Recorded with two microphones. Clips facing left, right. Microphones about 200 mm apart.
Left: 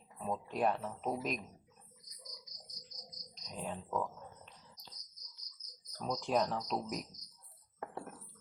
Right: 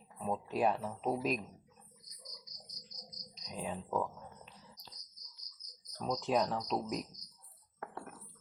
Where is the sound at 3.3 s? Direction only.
Centre (ahead or behind).